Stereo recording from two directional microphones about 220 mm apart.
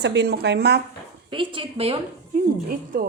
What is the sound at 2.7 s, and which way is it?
Speech, 45° right (ahead or behind).